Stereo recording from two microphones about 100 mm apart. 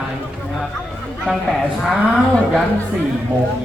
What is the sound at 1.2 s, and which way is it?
A man's voice, centre (ahead or behind).